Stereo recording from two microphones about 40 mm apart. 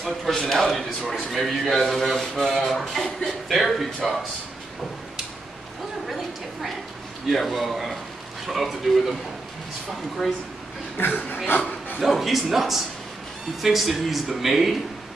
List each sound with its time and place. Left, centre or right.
0.3 s a man's voice: centre
3.4 s speech: centre
6.0 s a sound: centre
7.2 s speech: centre
11.1 s speech: left
12.0 s speech: centre